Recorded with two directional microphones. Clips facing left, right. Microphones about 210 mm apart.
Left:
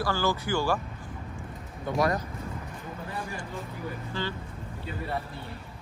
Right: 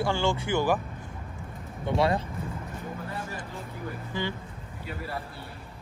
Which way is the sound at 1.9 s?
25° right (ahead or behind).